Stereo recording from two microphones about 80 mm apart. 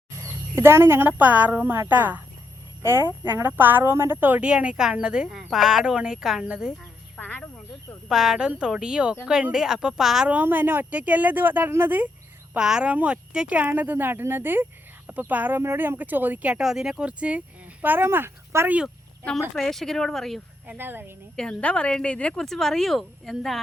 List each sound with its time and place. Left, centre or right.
0.2 s a woman's voice: right
2.8 s speech: right; by 6.7 s centre
7.2 s speech: left
8.0 s speech: centre
10.2 s speech: right
12.5 s speech: centre
16.6 s speech: centre
17.8 s speech: right
19.5 s speech: centre
20.7 s speech: right
21.3 s speech: centre